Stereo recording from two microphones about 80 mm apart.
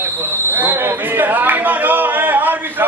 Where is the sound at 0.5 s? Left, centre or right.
Right.